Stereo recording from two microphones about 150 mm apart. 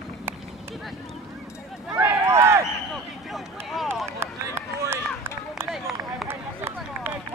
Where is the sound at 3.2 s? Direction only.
Centre (ahead or behind).